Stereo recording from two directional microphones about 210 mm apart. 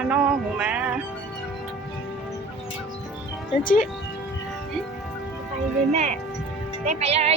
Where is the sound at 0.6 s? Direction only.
5° right (ahead or behind).